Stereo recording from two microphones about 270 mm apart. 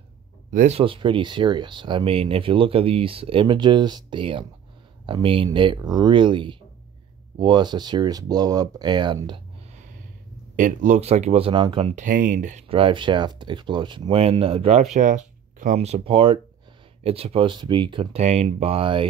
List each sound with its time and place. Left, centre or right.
0.5 s speech: right